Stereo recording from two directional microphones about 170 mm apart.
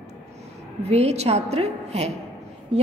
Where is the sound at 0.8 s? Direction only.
40° right (ahead or behind).